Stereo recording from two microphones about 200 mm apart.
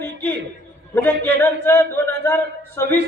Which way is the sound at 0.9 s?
10° left (ahead or behind).